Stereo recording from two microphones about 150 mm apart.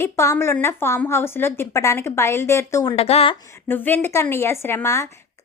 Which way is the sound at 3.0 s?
40° left (ahead or behind).